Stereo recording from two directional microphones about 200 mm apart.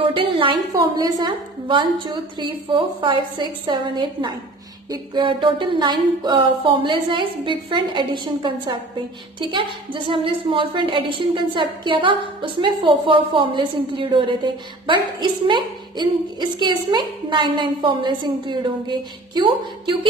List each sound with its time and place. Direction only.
0.1 s a woman's voice: 25° right (ahead or behind)